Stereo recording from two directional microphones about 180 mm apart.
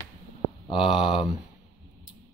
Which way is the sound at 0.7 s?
30° left (ahead or behind).